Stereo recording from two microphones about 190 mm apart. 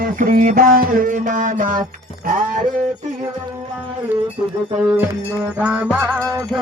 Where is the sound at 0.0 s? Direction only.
45° right (ahead or behind).